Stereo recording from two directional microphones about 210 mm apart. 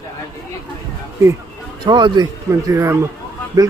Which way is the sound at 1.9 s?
20° right (ahead or behind).